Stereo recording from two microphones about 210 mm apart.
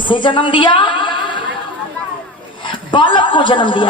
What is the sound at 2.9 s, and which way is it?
Speech, 25° left (ahead or behind).